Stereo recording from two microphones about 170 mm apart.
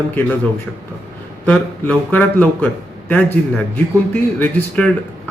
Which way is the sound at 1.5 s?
10° left (ahead or behind).